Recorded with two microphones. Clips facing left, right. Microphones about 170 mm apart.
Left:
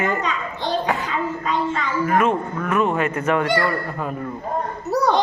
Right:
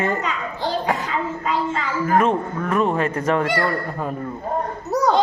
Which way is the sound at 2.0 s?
35° right (ahead or behind).